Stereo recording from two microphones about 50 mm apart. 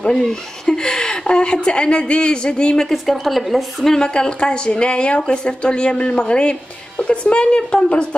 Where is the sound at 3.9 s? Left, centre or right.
Centre.